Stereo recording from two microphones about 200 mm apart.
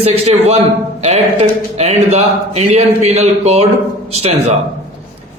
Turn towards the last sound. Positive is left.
turn(degrees=-35)  # may be behind; listen again after turning